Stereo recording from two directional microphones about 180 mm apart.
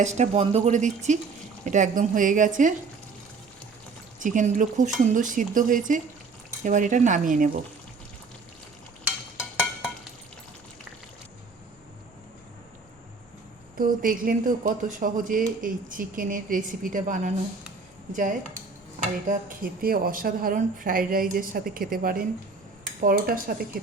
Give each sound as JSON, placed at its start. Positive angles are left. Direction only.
{"t": 0.0, "sound": "speech", "side_deg": -40}
{"t": 4.2, "sound": "speech", "side_deg": -45}
{"t": 13.7, "sound": "speech", "side_deg": -50}